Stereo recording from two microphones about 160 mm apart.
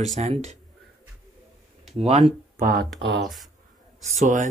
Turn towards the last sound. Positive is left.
turn(degrees=-50)  # may be behind; listen again after turning